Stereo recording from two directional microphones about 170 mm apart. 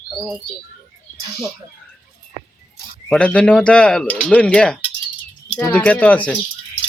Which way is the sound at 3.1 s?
5° left (ahead or behind).